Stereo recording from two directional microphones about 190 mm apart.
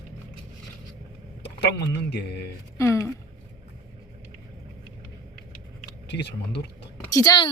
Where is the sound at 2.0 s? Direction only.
60° left (ahead or behind).